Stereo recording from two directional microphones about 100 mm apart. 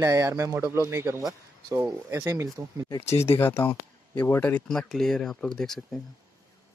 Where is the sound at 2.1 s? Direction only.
30° right (ahead or behind).